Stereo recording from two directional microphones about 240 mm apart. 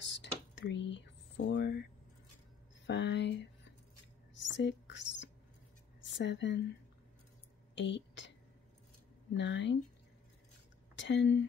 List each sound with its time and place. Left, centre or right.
0.0 s a sound: left
2.9 s speech: left
4.4 s whispering: left
6.0 s a woman's voice: left
7.7 s a sound: left
9.4 s speech: left
11.0 s speech: left